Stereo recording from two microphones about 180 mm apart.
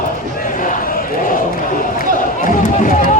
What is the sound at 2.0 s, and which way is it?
Run, 50° left (ahead or behind).